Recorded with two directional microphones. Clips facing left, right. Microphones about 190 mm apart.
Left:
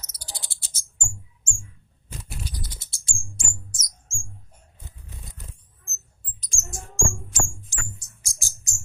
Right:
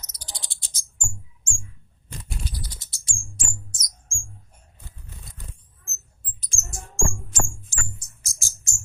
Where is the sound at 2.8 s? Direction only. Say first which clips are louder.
Left 1 dB; 25° left (ahead or behind).